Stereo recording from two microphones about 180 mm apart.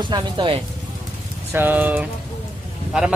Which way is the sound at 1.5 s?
10° right (ahead or behind).